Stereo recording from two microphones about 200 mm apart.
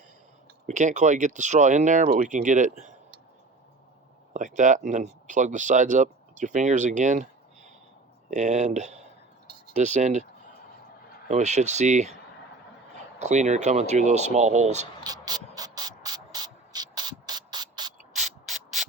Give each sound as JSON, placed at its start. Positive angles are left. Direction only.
{"t": 0.7, "sound": "speech", "side_deg": -35}
{"t": 4.4, "sound": "speech", "side_deg": -40}
{"t": 11.3, "sound": "speech", "side_deg": -35}
{"t": 13.1, "sound": "speech", "side_deg": -35}
{"t": 15.0, "sound": "a sound", "side_deg": -20}
{"t": 18.1, "sound": "sanding", "side_deg": 0}